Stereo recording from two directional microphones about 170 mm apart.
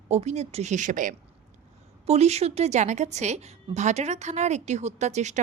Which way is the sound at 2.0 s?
40° right (ahead or behind).